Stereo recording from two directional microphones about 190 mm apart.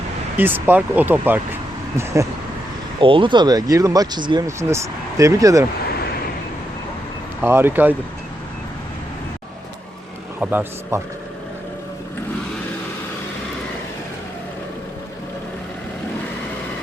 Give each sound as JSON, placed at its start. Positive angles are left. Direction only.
{"t": 0.3, "sound": "speech", "side_deg": -10}
{"t": 3.0, "sound": "speech", "side_deg": -25}
{"t": 7.4, "sound": "speech", "side_deg": -10}
{"t": 10.4, "sound": "speech", "side_deg": -10}